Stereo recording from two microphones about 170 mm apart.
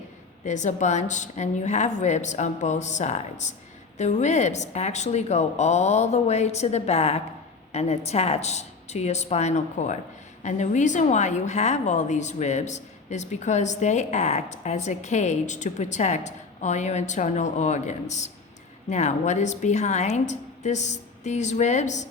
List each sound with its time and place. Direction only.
0.4 s a woman's voice: 45° left (ahead or behind)